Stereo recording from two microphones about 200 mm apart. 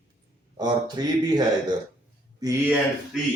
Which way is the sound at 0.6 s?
20° right (ahead or behind).